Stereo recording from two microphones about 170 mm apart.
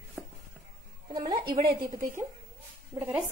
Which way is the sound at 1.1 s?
25° right (ahead or behind).